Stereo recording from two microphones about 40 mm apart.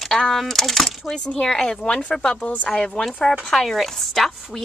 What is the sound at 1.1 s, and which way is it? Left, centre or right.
A woman's voice, centre.